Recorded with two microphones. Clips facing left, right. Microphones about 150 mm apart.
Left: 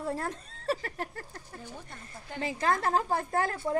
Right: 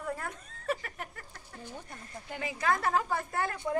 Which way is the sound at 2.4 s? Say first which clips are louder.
Left 2 dB; 35° left (ahead or behind).